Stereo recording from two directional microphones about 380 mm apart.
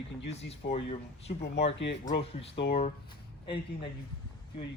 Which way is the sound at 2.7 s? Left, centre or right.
Centre.